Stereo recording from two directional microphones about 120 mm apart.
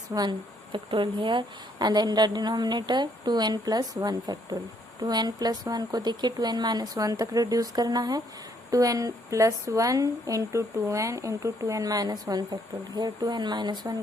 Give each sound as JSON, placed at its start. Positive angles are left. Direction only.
{"t": 0.1, "sound": "a woman's voice", "side_deg": -35}